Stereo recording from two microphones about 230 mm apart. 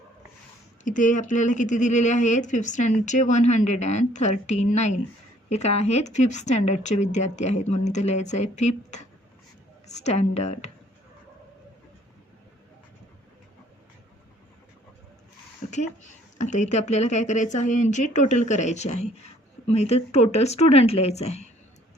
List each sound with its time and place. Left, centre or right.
0.9 s a woman's voice: left
15.6 s a sound: left
16.4 s a woman's voice: left